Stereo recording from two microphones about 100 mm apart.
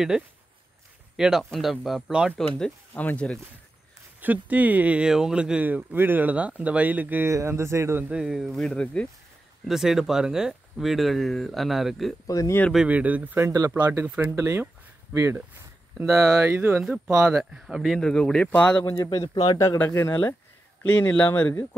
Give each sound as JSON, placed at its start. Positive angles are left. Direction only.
{"t": 1.1, "sound": "speech", "side_deg": -5}
{"t": 2.9, "sound": "speech", "side_deg": 15}
{"t": 4.2, "sound": "speech", "side_deg": -15}
{"t": 7.2, "sound": "speech", "side_deg": -30}
{"t": 8.1, "sound": "speech", "side_deg": -5}
{"t": 9.7, "sound": "speech", "side_deg": -5}
{"t": 12.3, "sound": "speech", "side_deg": 35}
{"t": 12.7, "sound": "speech", "side_deg": -15}
{"t": 13.7, "sound": "speech", "side_deg": -35}
{"t": 14.0, "sound": "speech", "side_deg": -15}
{"t": 14.3, "sound": "speech", "side_deg": -30}
{"t": 17.3, "sound": "speech", "side_deg": -5}
{"t": 19.2, "sound": "speech", "side_deg": 45}
{"t": 19.9, "sound": "speech", "side_deg": 25}